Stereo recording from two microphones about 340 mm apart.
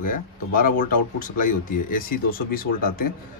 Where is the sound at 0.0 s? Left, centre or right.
Left.